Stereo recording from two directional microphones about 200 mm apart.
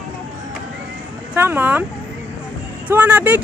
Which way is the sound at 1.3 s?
10° right (ahead or behind).